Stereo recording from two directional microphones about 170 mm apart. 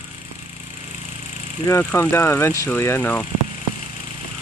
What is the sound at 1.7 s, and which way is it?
Speech, 15° left (ahead or behind).